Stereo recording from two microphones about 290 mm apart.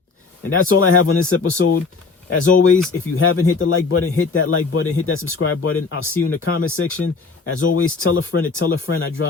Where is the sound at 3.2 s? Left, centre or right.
Left.